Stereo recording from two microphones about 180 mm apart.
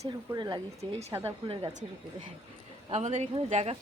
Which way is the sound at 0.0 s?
15° right (ahead or behind).